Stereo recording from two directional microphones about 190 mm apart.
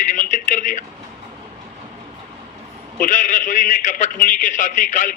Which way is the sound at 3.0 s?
40° left (ahead or behind).